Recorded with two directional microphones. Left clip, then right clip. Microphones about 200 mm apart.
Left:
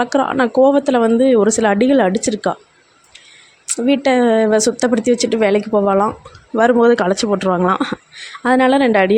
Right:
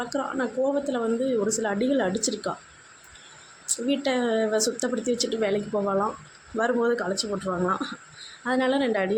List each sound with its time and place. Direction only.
0.0 s a woman's voice: 40° left (ahead or behind)
3.8 s a woman's voice: 40° left (ahead or behind)